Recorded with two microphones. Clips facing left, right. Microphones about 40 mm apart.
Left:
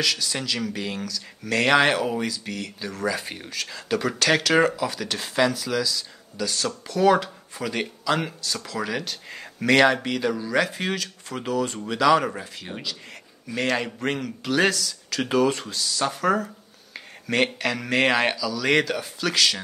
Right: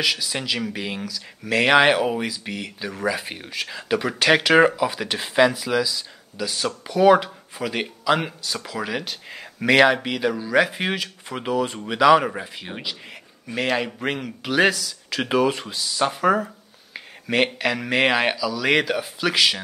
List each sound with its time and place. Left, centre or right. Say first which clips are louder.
0.0 s speech: right 2 dB; centre
13.6 s speech: right 1 dB; centre